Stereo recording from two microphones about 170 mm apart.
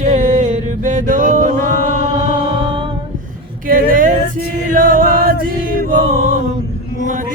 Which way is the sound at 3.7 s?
55° right (ahead or behind).